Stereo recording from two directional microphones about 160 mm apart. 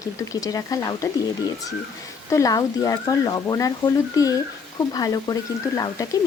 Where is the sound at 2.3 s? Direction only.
20° left (ahead or behind).